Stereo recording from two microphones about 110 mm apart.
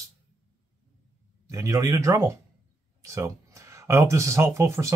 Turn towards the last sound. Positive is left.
turn(degrees=-25)  # may be behind; listen again after turning